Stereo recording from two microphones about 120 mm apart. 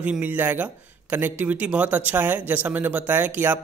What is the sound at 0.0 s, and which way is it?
A man's voice, 15° right (ahead or behind).